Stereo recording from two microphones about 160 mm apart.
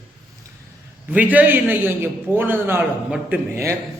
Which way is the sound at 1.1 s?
10° right (ahead or behind).